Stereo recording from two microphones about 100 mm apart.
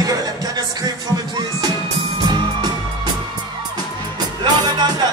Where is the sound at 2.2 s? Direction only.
45° right (ahead or behind).